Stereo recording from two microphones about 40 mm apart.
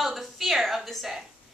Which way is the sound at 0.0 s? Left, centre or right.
Centre.